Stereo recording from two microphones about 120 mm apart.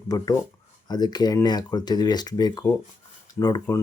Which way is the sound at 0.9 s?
35° left (ahead or behind).